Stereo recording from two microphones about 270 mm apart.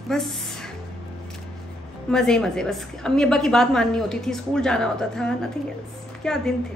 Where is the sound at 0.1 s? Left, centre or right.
Centre.